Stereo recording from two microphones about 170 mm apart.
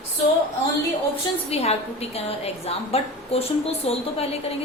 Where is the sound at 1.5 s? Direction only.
35° left (ahead or behind).